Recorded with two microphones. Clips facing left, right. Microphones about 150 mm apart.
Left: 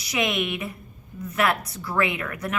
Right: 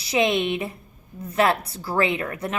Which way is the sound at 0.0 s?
30° right (ahead or behind).